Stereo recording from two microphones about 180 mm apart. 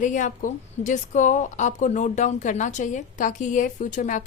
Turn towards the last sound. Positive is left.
turn(degrees=45)  # may be behind; listen again after turning